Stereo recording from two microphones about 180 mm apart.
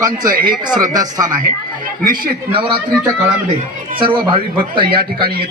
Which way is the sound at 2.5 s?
25° right (ahead or behind).